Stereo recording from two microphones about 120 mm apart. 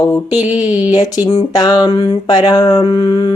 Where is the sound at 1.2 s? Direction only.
35° left (ahead or behind).